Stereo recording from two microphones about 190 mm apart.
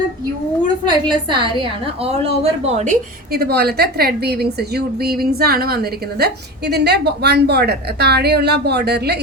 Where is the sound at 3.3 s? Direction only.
55° right (ahead or behind).